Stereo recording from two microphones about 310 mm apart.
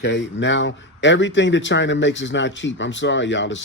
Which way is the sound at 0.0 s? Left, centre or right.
Left.